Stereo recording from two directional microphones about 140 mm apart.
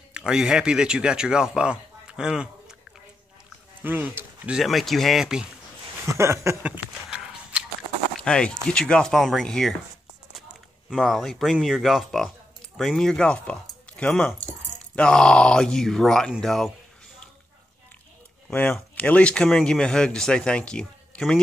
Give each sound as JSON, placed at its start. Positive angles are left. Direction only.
{"t": 0.1, "sound": "speech", "side_deg": -5}
{"t": 3.8, "sound": "speech", "side_deg": -15}
{"t": 4.6, "sound": "speech", "side_deg": 0}
{"t": 6.1, "sound": "a sound", "side_deg": -20}
{"t": 8.2, "sound": "speech", "side_deg": 5}
{"t": 10.9, "sound": "speech", "side_deg": 0}
{"t": 18.5, "sound": "speech", "side_deg": 15}